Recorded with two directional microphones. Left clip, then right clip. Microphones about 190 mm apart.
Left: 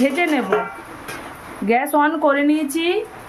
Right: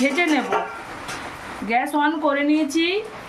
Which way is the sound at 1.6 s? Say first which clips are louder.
Left 4 dB; 50° left (ahead or behind).